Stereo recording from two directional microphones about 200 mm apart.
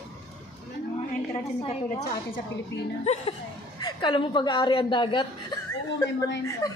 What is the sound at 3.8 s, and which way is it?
A woman's voice, 25° left (ahead or behind).